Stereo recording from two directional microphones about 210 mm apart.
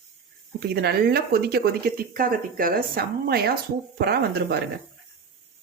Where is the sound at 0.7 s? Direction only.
50° right (ahead or behind).